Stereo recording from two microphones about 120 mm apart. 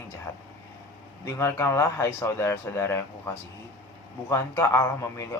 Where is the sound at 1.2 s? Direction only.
25° left (ahead or behind).